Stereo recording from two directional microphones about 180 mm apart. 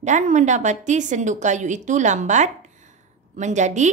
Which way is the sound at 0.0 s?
40° right (ahead or behind).